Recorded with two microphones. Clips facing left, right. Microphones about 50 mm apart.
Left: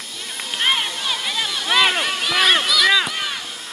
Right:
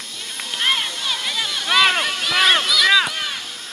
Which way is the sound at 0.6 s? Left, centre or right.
Centre.